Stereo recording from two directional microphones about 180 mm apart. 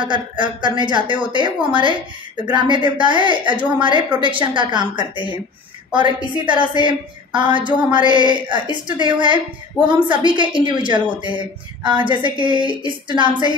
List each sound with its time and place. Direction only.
0.0 s a woman's voice: 25° right (ahead or behind)